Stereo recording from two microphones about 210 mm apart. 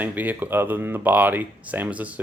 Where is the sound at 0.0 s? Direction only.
10° right (ahead or behind).